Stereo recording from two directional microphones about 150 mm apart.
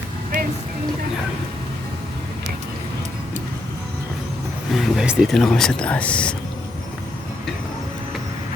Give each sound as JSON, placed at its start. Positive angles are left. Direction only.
{"t": 0.3, "sound": "music", "side_deg": -60}
{"t": 4.7, "sound": "speech", "side_deg": 0}